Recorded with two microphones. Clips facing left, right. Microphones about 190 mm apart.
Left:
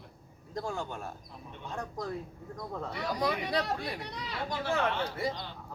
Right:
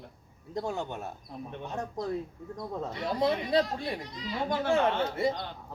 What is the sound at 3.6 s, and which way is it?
Speech, 70° left (ahead or behind).